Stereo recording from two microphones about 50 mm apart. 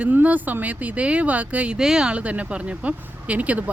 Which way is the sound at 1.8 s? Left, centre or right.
Centre.